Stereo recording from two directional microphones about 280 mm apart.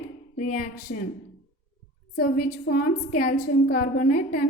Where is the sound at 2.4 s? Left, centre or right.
Left.